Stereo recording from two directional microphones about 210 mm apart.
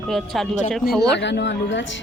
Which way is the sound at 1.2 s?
55° left (ahead or behind).